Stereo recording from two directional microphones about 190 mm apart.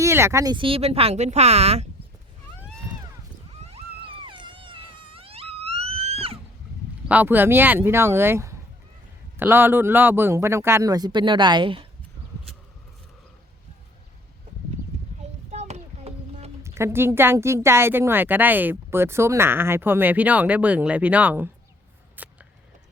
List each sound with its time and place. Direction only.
0.0 s speech: 15° right (ahead or behind); by 1.9 s 35° right (ahead or behind)
3.5 s wail: 35° right (ahead or behind)
7.1 s speech: 10° right (ahead or behind); by 11.9 s 25° right (ahead or behind)
15.5 s a sound: 35° right (ahead or behind)
16.6 s speech: 15° right (ahead or behind)
22.2 s a sound: 10° right (ahead or behind)